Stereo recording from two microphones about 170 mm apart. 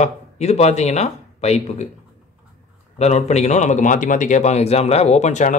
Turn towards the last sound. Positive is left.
turn(degrees=45)  # may be behind; listen again after turning